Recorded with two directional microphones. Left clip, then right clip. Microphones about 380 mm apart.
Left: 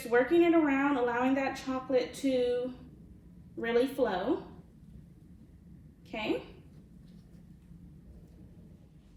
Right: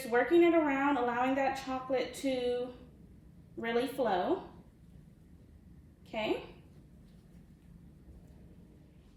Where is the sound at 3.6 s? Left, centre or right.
Centre.